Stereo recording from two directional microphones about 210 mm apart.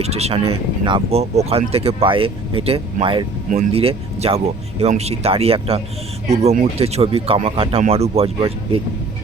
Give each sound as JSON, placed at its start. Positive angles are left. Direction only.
{"t": 0.0, "sound": "speech", "side_deg": -30}